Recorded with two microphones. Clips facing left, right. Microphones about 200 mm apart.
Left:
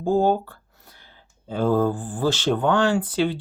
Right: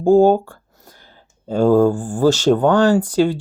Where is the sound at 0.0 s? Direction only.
45° right (ahead or behind).